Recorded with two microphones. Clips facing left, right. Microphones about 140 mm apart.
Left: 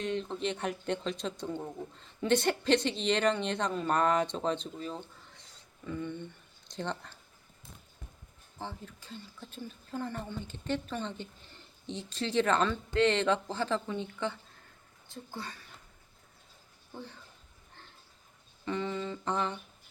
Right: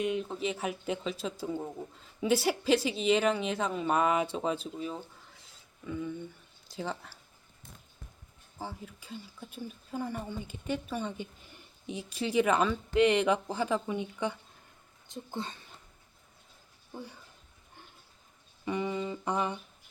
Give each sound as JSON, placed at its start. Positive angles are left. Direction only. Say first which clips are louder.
{"t": 0.0, "sound": "speech", "louder": "right 2 dB", "side_deg": -10}
{"t": 8.5, "sound": "speech", "louder": "right 1 dB", "side_deg": -10}
{"t": 16.9, "sound": "speech", "louder": "right 1 dB", "side_deg": -10}
{"t": 18.6, "sound": "speech", "louder": "right 2 dB", "side_deg": -15}